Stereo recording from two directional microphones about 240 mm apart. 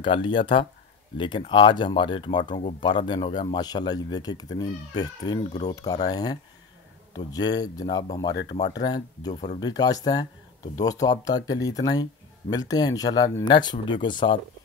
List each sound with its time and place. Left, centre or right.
0.0 s speech: centre